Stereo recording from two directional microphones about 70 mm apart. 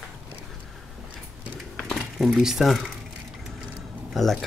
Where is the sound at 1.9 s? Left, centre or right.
Centre.